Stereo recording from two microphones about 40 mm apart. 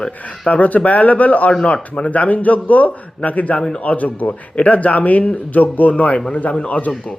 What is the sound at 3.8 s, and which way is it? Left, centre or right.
Speech, left.